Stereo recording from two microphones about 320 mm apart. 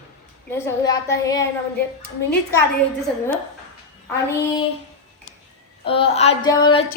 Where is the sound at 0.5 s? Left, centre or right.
Centre.